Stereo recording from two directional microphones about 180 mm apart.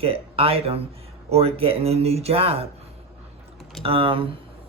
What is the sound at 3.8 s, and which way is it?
Speech, 30° right (ahead or behind).